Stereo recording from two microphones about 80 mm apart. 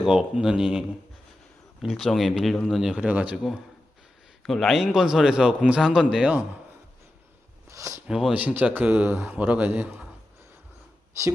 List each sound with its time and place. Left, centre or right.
0.0 s speech: centre
2.9 s speech: centre
4.4 s speech: centre
7.7 s speech: right
8.0 s speech: centre
9.1 s a man's voice: right
9.4 s speech: centre